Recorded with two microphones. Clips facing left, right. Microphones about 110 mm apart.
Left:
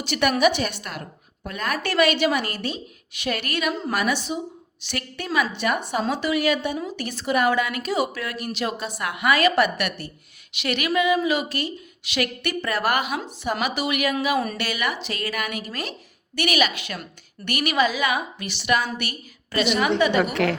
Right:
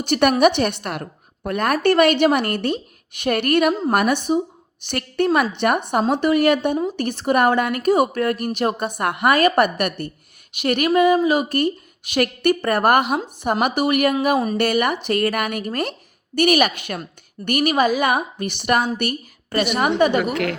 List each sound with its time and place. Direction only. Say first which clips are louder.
0.0 s a woman's voice: right 5 dB; 50° right (ahead or behind)
14.3 s speech: right 4 dB; 25° right (ahead or behind)
14.6 s a woman's voice: right 8 dB; 50° right (ahead or behind)
20.3 s a woman's voice: even; 30° left (ahead or behind)